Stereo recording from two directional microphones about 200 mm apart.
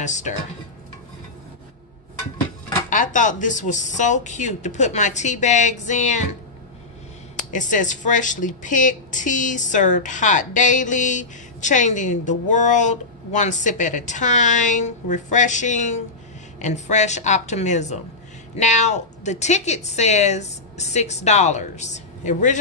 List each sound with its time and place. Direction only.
0.0 s speech: 35° left (ahead or behind)
2.9 s speech: 40° left (ahead or behind)
7.3 s speech: 40° left (ahead or behind)